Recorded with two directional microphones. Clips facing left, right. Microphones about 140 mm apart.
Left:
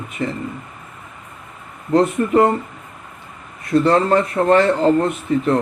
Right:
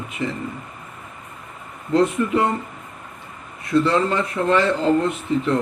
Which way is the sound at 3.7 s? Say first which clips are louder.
Left 4 dB; 45° left (ahead or behind).